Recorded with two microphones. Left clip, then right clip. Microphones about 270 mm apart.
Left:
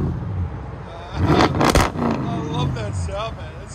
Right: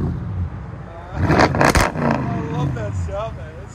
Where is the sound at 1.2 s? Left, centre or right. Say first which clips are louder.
Right 2 dB; centre.